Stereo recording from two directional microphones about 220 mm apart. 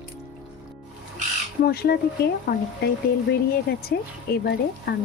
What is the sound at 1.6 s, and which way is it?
Speech, 45° left (ahead or behind).